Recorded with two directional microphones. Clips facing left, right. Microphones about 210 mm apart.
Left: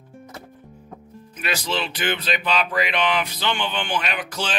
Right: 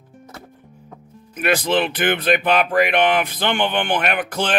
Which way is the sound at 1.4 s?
55° right (ahead or behind).